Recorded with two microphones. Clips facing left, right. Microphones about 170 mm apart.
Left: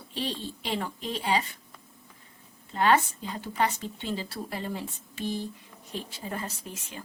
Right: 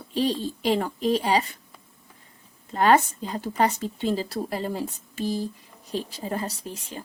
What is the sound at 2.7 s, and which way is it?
A woman's voice, 40° right (ahead or behind).